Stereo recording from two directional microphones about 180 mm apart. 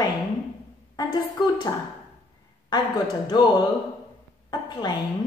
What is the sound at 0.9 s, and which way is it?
Speech, 20° left (ahead or behind).